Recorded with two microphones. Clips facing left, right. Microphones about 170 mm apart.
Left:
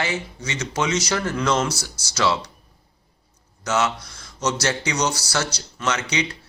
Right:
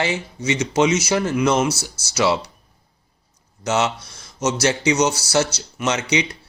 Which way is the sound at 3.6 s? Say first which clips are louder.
Right 2 dB; 25° right (ahead or behind).